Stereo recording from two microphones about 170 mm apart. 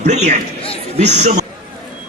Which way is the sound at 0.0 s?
40° right (ahead or behind).